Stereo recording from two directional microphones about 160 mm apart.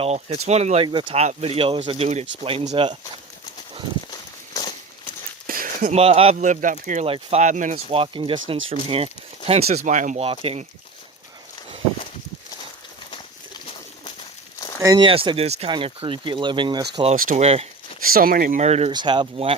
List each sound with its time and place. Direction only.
0.0 s a man's voice: 45° right (ahead or behind)
0.9 s speech: 30° right (ahead or behind)
5.5 s a sound: 60° right (ahead or behind)
6.0 s a man's voice: 40° right (ahead or behind); by 7.0 s 55° right (ahead or behind)
7.0 s a man's voice: 40° right (ahead or behind)
10.2 s speech: 40° right (ahead or behind)
14.8 s speech: 20° right (ahead or behind)
15.0 s speech: 30° right (ahead or behind)
17.2 s speech: 60° right (ahead or behind)
17.4 s speech: 40° right (ahead or behind)
18.0 s speech: 65° right (ahead or behind); by 18.9 s 45° right (ahead or behind)
18.9 s speech: 30° right (ahead or behind)